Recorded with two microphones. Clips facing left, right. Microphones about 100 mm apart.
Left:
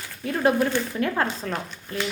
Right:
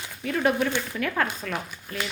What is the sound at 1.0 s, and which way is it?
Speech, 30° left (ahead or behind).